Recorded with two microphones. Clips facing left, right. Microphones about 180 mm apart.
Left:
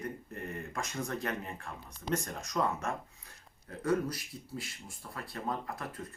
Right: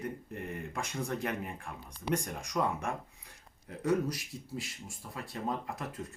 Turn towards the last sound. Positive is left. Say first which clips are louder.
# right 1 dB
turn(degrees=-20)  # may be behind; listen again after turning